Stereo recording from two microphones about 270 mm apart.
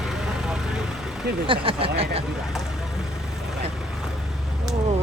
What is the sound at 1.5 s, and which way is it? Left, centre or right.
Speech, centre.